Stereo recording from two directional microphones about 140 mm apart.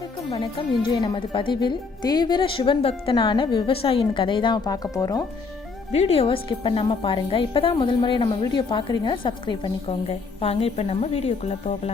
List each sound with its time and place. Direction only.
0.3 s a woman's voice: 35° left (ahead or behind)
5.9 s a woman's voice: 50° left (ahead or behind)